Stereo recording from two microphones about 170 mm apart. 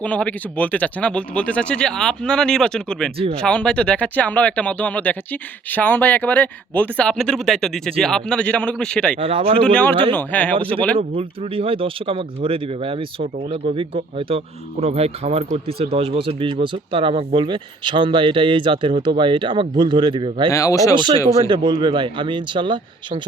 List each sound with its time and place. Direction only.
0.0 s speech: 10° left (ahead or behind)
9.2 s speech: 35° right (ahead or behind)
9.6 s speech: 10° left (ahead or behind)
11.2 s speech: 35° right (ahead or behind)
20.5 s speech: 20° left (ahead or behind)
20.9 s speech: 30° right (ahead or behind)